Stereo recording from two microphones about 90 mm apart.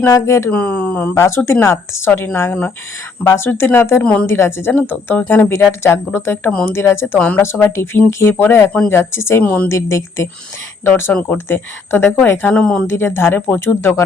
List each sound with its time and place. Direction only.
0.1 s a woman's voice: 30° left (ahead or behind)
0.5 s speech: 15° left (ahead or behind)
1.5 s speech: 30° left (ahead or behind)
4.0 s speech: 15° left (ahead or behind)
4.3 s speech: 25° left (ahead or behind)
6.5 s speech: 15° left (ahead or behind)
6.7 s speech: 25° left (ahead or behind)
7.2 s speech: 15° left (ahead or behind)
7.4 s speech: 25° left (ahead or behind)
9.4 s speech: 20° left (ahead or behind)
9.6 s a woman's voice: 30° left (ahead or behind)
12.4 s speech: 10° left (ahead or behind)
12.9 s speech: 25° left (ahead or behind)